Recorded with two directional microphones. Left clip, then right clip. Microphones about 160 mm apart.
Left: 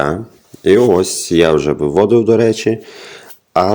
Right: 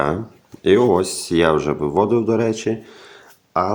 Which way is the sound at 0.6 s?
20° left (ahead or behind).